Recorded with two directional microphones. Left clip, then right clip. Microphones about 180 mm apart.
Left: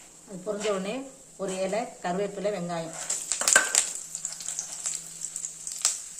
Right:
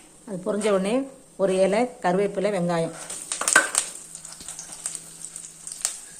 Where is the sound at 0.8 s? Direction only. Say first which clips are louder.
Right 8 dB; 35° right (ahead or behind).